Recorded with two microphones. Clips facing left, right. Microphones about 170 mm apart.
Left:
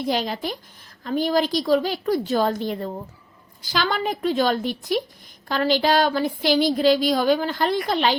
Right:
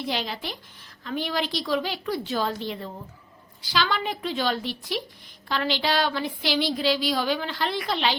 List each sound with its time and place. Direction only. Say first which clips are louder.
0.0 s a woman's voice: left 6 dB; 45° left (ahead or behind)